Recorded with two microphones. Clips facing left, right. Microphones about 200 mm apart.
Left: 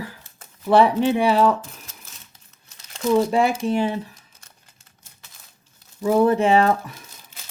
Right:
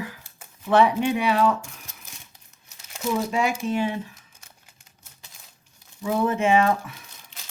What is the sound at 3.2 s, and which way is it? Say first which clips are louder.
Speech: left 4 dB; 30° left (ahead or behind).